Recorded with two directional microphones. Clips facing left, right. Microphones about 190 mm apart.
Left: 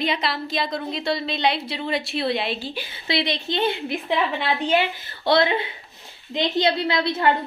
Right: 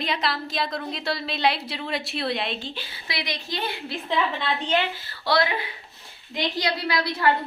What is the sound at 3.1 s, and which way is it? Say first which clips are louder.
A woman's voice: left 8 dB; 25° left (ahead or behind).